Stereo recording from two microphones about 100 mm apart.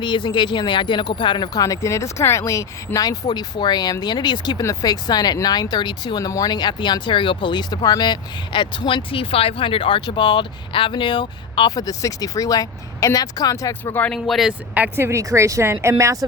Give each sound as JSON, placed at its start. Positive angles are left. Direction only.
{"t": 0.0, "sound": "speech", "side_deg": 50}
{"t": 11.7, "sound": "speech", "side_deg": 35}
{"t": 13.9, "sound": "speech", "side_deg": 15}
{"t": 14.3, "sound": "speech", "side_deg": 0}
{"t": 14.8, "sound": "speech", "side_deg": -25}